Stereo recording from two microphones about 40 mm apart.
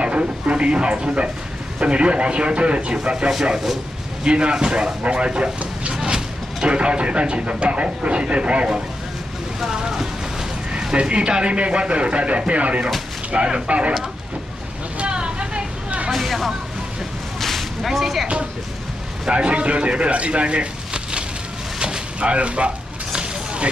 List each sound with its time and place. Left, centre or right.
0.0 s speech: right
9.6 s speech: centre; by 12.8 s right
13.3 s speech: right
15.0 s vehicle: right
16.1 s a sound: centre
19.2 s speech: right
21.7 s a sound: centre